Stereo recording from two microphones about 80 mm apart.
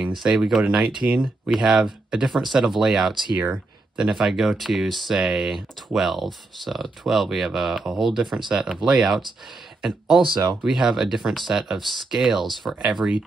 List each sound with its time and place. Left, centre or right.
0.2 s speech: centre
3.3 s a sound: centre
4.0 s speech: centre
10.2 s speech: right
10.7 s speech: centre